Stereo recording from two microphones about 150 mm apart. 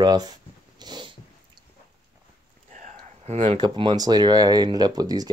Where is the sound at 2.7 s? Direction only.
55° right (ahead or behind).